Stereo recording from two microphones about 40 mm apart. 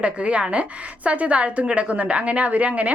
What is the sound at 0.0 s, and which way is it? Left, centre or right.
A woman's voice, right.